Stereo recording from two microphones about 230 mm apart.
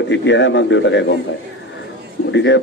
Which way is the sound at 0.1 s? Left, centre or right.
Left.